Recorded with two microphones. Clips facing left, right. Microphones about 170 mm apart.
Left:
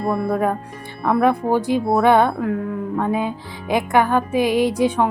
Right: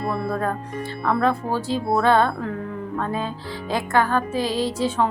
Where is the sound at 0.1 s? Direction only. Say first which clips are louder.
Left 6 dB; 15° left (ahead or behind).